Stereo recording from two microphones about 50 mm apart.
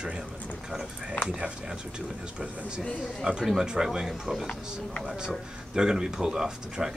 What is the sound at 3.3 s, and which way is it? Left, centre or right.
Speech, right.